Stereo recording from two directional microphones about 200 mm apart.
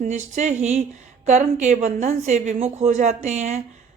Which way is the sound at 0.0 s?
35° right (ahead or behind).